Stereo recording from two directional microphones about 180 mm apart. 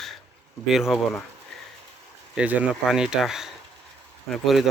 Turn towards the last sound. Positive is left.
turn(degrees=0)  # may be behind; listen again after turning